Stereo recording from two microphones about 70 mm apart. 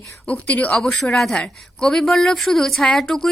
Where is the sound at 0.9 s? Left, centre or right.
Centre.